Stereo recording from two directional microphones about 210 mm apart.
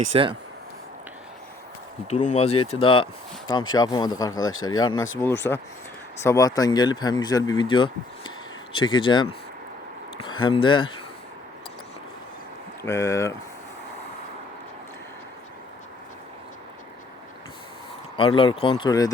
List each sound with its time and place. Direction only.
0.0 s speech: 25° right (ahead or behind)
2.0 s speech: 35° left (ahead or behind); by 4.4 s 20° left (ahead or behind)
4.4 s speech: 75° left (ahead or behind)
4.7 s speech: 20° left (ahead or behind)
10.5 s speech: 25° left (ahead or behind)
12.8 s speech: 15° left (ahead or behind)
18.2 s speech: 25° left (ahead or behind)